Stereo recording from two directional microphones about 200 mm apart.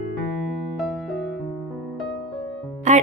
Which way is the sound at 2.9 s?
35° right (ahead or behind).